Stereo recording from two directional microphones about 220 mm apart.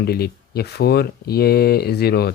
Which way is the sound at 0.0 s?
45° left (ahead or behind).